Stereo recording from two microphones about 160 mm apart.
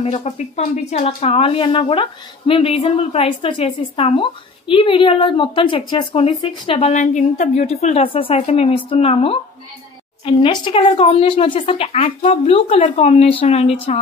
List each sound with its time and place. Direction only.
0.0 s speech: 40° left (ahead or behind)
6.9 s speech: 50° left (ahead or behind)